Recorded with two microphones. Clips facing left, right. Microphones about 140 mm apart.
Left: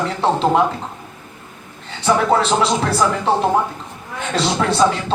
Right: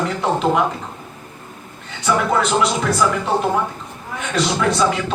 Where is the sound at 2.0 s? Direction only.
30° left (ahead or behind).